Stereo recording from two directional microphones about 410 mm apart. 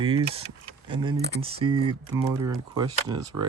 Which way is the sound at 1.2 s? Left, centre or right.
Right.